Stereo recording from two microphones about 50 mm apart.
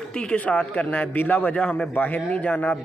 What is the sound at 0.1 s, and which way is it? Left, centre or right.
Speech, centre.